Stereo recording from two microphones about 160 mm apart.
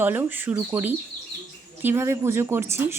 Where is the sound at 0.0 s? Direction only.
10° right (ahead or behind).